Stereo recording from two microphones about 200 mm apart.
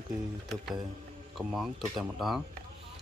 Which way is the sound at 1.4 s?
Centre (ahead or behind).